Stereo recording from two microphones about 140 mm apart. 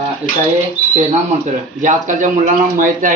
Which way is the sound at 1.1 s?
60° right (ahead or behind).